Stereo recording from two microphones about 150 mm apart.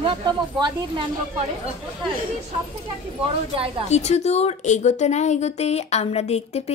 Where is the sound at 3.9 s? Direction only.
45° left (ahead or behind).